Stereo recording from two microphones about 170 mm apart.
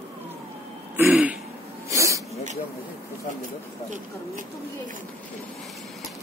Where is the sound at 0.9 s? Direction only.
10° right (ahead or behind).